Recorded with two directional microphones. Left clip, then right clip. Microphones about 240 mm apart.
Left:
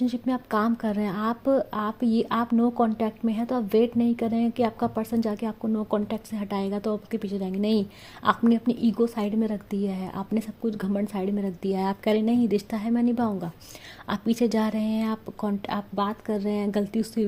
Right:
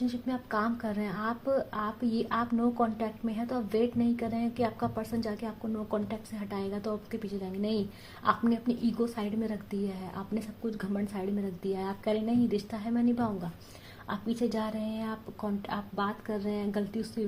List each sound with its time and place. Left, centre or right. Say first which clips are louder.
0.0 s a woman's voice: left 6 dB; left